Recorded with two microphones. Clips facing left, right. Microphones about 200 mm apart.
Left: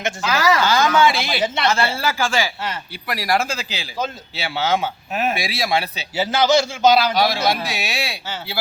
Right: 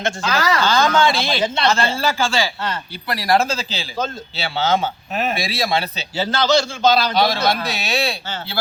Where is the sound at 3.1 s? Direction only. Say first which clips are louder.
Right 3 dB; 35° right (ahead or behind).